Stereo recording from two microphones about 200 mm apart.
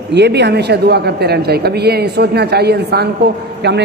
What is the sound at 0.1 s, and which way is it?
A man's voice, 60° right (ahead or behind).